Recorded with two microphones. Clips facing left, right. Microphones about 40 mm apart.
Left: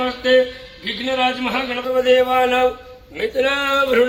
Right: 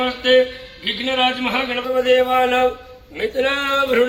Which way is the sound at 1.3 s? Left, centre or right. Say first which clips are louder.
Right 1 dB; right.